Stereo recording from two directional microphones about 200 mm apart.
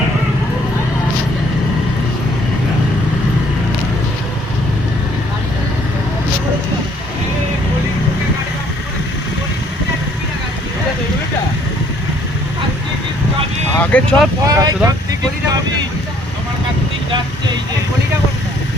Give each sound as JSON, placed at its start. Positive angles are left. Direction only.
{"t": 13.7, "sound": "vehicle", "side_deg": 5}
{"t": 14.4, "sound": "speech", "side_deg": -20}
{"t": 17.1, "sound": "vehicle", "side_deg": -20}